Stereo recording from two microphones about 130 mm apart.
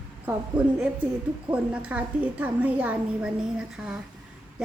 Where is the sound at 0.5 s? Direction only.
10° right (ahead or behind).